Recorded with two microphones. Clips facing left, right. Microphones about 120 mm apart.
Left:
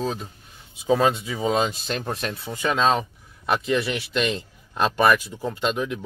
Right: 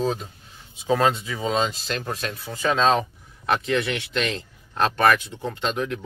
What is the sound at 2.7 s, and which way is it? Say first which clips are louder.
A man's voice: right 1 dB; 10° left (ahead or behind).